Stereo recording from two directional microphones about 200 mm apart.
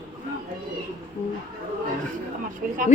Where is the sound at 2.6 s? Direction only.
40° right (ahead or behind).